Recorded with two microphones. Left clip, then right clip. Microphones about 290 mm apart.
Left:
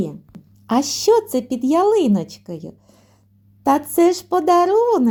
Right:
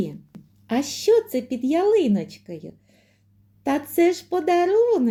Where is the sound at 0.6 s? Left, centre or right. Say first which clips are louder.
Left 5 dB; left.